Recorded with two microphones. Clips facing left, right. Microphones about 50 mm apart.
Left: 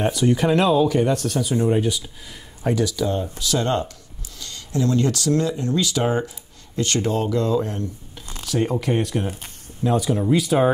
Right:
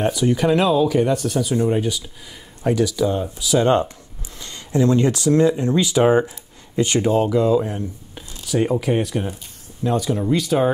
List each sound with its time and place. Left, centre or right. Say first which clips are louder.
0.0 s speech: right 1 dB; centre
3.6 s speech: right 6 dB; right; by 10.7 s centre